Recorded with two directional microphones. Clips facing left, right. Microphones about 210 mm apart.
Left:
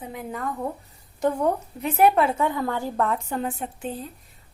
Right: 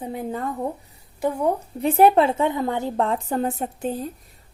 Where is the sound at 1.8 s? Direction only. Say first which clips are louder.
Right 3 dB; 30° right (ahead or behind).